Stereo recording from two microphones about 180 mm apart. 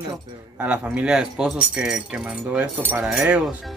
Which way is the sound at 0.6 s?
5° right (ahead or behind).